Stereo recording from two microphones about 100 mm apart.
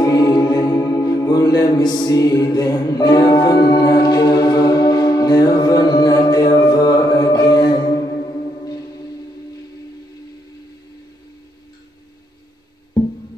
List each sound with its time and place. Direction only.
0.0 s music: 40° left (ahead or behind)